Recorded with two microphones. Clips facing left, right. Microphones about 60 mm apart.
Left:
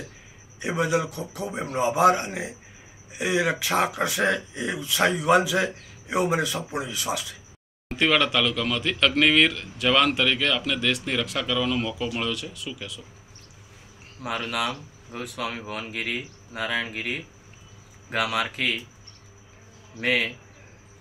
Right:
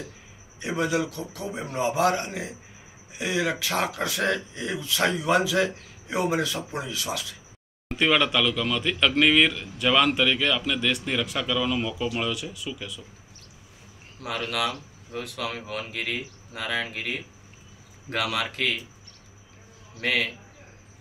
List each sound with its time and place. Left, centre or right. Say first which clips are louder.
0.6 s speech: left 1 dB; centre
8.0 s a man's voice: even; centre
14.2 s speech: even; centre
20.0 s speech: left 2 dB; centre